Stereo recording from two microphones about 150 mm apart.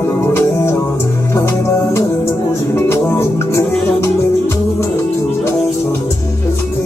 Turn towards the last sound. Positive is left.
turn(degrees=20)  # may be behind; listen again after turning